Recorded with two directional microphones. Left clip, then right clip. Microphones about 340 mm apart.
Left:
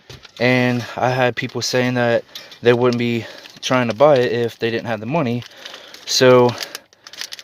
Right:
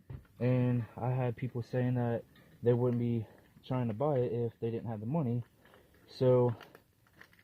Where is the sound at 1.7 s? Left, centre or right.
Left.